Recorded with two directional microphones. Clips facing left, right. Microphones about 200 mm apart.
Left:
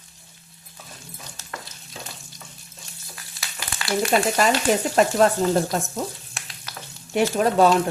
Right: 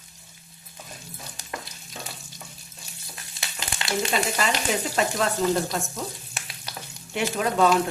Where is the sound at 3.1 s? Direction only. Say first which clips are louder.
Even; 25° right (ahead or behind).